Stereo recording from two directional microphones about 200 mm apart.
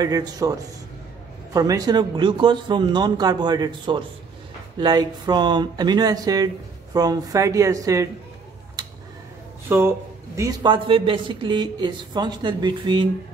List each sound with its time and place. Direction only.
0.0 s speech: 20° right (ahead or behind)
9.7 s speech: 10° right (ahead or behind)